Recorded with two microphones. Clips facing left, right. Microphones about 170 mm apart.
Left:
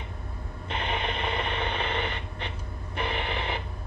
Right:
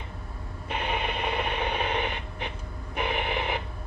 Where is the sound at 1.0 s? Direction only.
10° right (ahead or behind).